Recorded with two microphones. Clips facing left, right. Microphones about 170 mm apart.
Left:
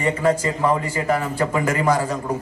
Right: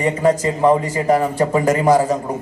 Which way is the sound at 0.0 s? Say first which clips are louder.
Right 3 dB; 30° right (ahead or behind).